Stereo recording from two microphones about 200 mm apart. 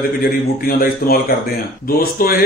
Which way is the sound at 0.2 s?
50° left (ahead or behind).